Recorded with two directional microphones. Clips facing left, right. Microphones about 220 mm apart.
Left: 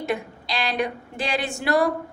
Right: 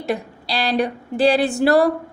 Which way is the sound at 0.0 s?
35° right (ahead or behind).